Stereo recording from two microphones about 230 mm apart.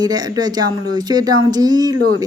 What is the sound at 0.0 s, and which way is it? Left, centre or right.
Speech, centre.